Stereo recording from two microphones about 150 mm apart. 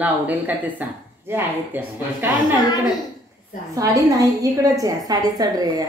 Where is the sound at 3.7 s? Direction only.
25° right (ahead or behind).